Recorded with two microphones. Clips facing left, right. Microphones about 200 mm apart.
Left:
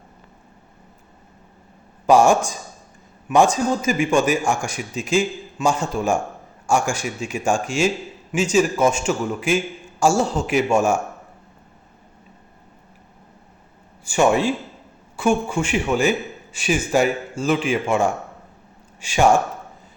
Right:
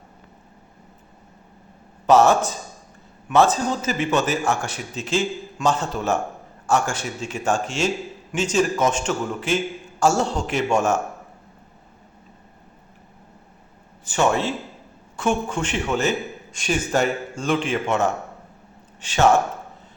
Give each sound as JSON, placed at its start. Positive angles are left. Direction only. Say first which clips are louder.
{"t": 2.0, "sound": "a man's voice", "louder": "left 1 dB", "side_deg": 10}
{"t": 14.0, "sound": "a man's voice", "louder": "left 3 dB", "side_deg": 10}